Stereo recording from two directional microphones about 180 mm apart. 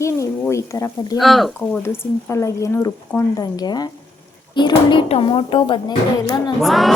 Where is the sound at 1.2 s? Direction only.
Centre (ahead or behind).